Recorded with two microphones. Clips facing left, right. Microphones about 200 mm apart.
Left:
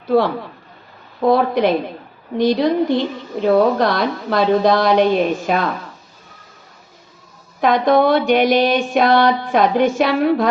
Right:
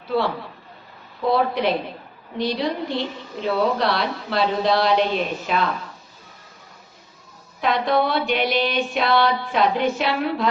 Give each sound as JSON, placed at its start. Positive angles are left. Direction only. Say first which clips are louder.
{"t": 0.1, "sound": "music", "louder": "left 7 dB", "side_deg": 50}
{"t": 7.6, "sound": "music", "louder": "left 6 dB", "side_deg": 45}